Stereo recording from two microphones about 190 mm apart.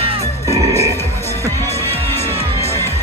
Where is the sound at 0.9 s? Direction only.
15° left (ahead or behind).